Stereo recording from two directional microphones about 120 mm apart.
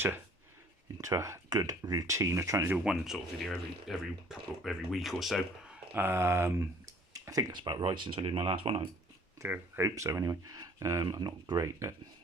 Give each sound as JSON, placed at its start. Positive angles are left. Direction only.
{"t": 0.9, "sound": "speech", "side_deg": -25}
{"t": 2.7, "sound": "speech", "side_deg": -5}
{"t": 5.9, "sound": "speech", "side_deg": -15}
{"t": 9.4, "sound": "speech", "side_deg": -20}